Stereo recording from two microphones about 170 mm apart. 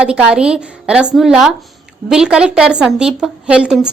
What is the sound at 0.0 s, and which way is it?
A woman's voice, 5° right (ahead or behind).